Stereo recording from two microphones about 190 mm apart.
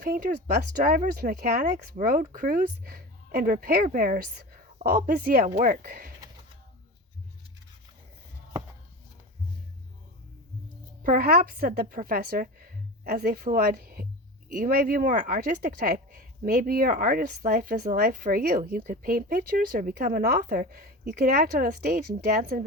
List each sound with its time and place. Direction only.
0.0 s speech: 50° right (ahead or behind)
11.0 s a woman's voice: 50° right (ahead or behind)